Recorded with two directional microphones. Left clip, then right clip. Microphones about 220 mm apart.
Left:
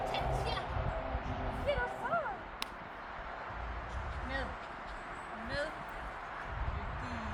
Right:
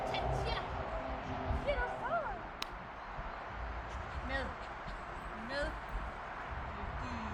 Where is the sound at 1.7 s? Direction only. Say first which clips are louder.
Left 2 dB; 15° left (ahead or behind).